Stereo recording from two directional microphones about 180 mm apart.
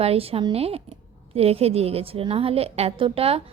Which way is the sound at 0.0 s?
35° right (ahead or behind).